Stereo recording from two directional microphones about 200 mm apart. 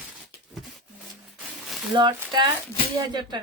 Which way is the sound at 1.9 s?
25° right (ahead or behind).